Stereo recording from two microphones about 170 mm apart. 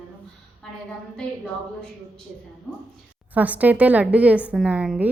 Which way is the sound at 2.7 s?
5° left (ahead or behind).